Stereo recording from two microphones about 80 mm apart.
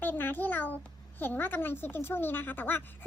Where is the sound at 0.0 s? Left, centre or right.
Left.